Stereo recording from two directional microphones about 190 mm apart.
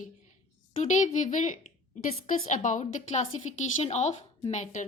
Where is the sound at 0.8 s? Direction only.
40° left (ahead or behind).